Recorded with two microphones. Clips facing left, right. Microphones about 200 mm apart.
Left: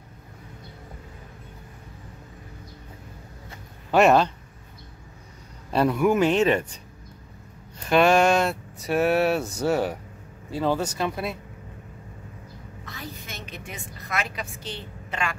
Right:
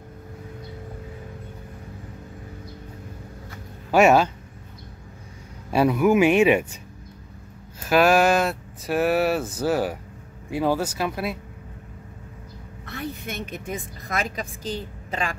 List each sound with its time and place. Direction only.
3.9 s speech: 5° right (ahead or behind)
5.7 s speech: 5° right (ahead or behind)
7.8 s speech: 5° right (ahead or behind)
12.8 s a woman's voice: 60° right (ahead or behind); by 15.3 s 35° right (ahead or behind)